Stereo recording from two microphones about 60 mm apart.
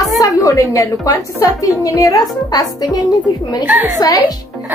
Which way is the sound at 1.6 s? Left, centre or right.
Left.